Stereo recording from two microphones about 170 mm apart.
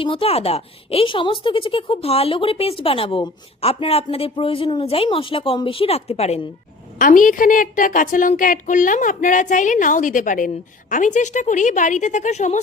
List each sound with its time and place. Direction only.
0.0 s a woman's voice: 30° left (ahead or behind)
7.0 s a woman's voice: 50° left (ahead or behind)